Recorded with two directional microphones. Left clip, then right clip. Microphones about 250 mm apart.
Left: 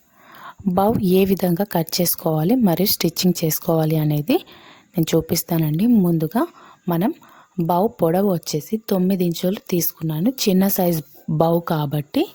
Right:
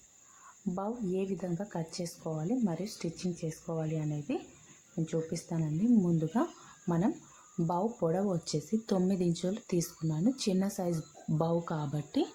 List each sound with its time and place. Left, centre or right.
0.8 s speech: left